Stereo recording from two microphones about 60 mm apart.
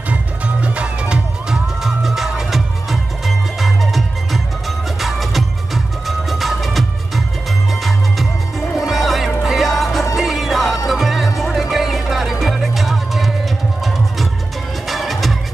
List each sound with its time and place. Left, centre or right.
0.1 s music: right
1.8 s music: centre
8.7 s music: centre